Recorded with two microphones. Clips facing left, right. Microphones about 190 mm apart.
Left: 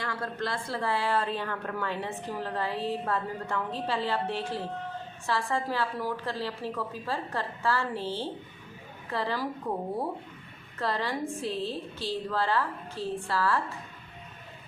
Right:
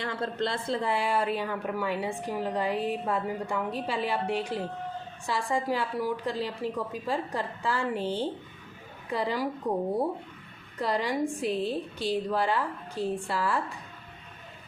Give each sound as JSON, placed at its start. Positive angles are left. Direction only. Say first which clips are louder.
{"t": 0.0, "sound": "speech", "louder": "right 3 dB", "side_deg": -25}
{"t": 10.8, "sound": "speech", "louder": "right 3 dB", "side_deg": -15}